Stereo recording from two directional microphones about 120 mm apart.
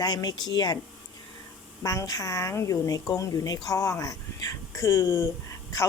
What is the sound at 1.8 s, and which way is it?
Speech, 30° left (ahead or behind).